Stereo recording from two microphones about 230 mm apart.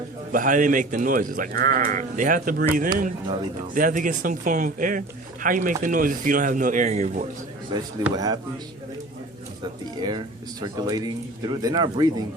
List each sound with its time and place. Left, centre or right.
0.3 s speech: right
7.7 s a man's voice: centre
10.0 s a man's voice: centre